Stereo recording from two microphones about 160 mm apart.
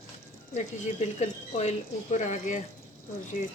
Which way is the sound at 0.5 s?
45° left (ahead or behind).